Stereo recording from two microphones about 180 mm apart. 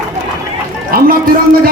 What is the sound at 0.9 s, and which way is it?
Speech, 55° right (ahead or behind).